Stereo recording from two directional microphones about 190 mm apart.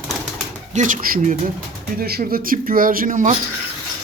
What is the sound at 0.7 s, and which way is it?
Speech, 40° right (ahead or behind).